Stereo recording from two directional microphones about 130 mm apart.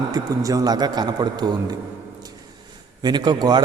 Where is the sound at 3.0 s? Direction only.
35° right (ahead or behind).